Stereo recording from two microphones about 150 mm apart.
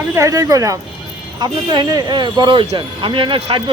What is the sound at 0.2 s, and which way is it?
Speech, 25° right (ahead or behind).